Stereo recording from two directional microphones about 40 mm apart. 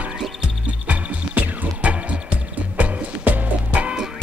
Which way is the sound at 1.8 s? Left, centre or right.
Right.